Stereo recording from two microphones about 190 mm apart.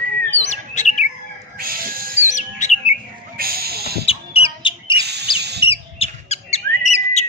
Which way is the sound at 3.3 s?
50° right (ahead or behind).